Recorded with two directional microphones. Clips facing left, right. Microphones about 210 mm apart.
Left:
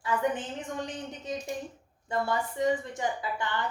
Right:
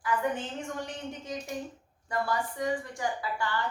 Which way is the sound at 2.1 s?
25° left (ahead or behind).